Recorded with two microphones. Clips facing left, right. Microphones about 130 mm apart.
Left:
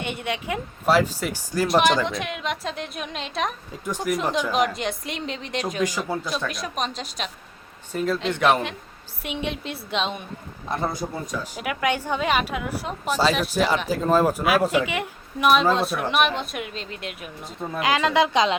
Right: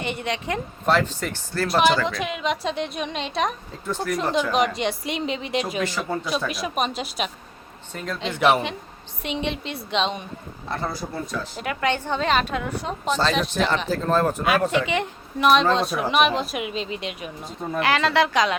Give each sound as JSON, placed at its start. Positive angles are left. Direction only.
{"t": 0.0, "sound": "a woman's voice", "side_deg": 0}
{"t": 1.6, "sound": "a woman's voice", "side_deg": 0}
{"t": 3.8, "sound": "a woman's voice", "side_deg": 15}
{"t": 4.1, "sound": "a woman's voice", "side_deg": 0}
{"t": 7.9, "sound": "a woman's voice", "side_deg": 5}
{"t": 10.7, "sound": "a woman's voice", "side_deg": 20}
{"t": 17.7, "sound": "a woman's voice", "side_deg": 15}